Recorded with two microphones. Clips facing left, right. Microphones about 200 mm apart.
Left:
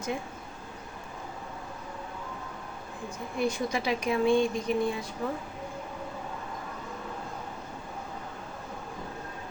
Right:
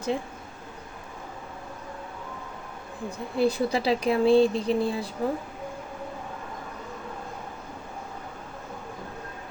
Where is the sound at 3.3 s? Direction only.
35° right (ahead or behind).